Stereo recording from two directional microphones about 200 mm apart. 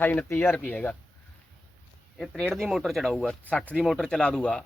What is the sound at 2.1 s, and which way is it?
A man's voice, 5° left (ahead or behind).